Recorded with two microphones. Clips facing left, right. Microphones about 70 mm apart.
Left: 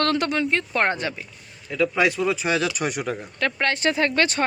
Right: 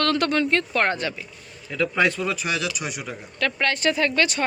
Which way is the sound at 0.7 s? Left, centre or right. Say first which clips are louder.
Even; left.